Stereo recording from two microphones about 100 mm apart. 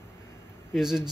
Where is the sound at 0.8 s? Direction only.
5° right (ahead or behind).